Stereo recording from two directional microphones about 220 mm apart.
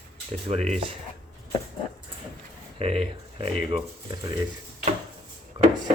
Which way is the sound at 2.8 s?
25° right (ahead or behind).